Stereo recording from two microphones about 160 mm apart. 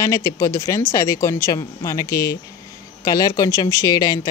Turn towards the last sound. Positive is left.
turn(degrees=25)  # may be behind; listen again after turning